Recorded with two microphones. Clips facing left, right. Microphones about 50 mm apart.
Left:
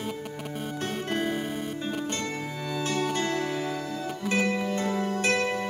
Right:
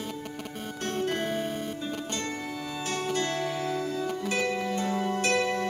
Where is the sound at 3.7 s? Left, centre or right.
Centre.